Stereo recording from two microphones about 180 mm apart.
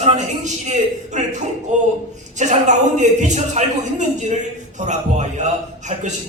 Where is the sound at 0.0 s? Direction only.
40° right (ahead or behind).